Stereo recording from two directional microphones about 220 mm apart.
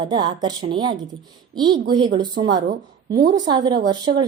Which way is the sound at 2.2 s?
20° right (ahead or behind).